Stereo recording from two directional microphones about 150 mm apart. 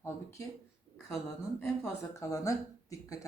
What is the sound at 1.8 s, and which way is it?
Speech, 20° left (ahead or behind).